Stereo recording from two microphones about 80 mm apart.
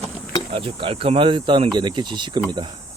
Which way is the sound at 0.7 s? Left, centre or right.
Right.